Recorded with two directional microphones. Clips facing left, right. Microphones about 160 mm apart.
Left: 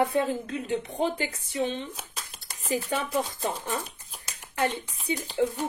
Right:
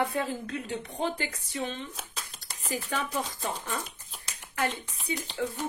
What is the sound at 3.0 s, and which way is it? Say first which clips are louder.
Speech: left 4 dB; 30° left (ahead or behind).